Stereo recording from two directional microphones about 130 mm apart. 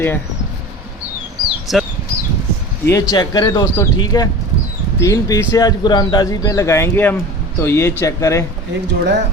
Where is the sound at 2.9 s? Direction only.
30° left (ahead or behind).